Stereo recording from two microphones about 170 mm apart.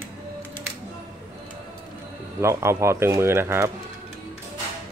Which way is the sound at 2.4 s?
15° right (ahead or behind).